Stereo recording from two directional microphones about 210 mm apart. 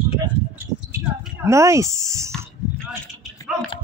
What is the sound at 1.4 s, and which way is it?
Speech, 15° right (ahead or behind).